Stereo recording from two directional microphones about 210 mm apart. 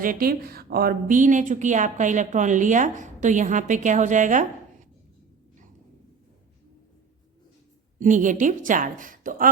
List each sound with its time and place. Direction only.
0.0 s speech: 45° right (ahead or behind)
7.9 s speech: 40° right (ahead or behind)